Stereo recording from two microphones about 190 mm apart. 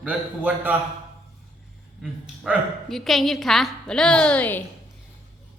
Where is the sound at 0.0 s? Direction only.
5° right (ahead or behind).